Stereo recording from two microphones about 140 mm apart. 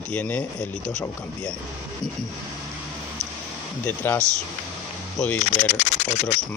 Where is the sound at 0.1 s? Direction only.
10° left (ahead or behind).